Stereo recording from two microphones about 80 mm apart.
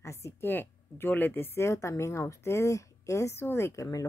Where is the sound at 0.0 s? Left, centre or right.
Left.